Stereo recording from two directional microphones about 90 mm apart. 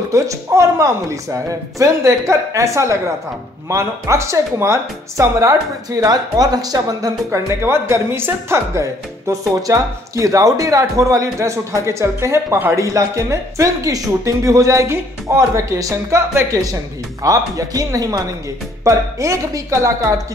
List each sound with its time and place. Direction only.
0.1 s speech: 35° right (ahead or behind)
7.2 s speech: 30° right (ahead or behind)
9.3 s speech: 40° right (ahead or behind)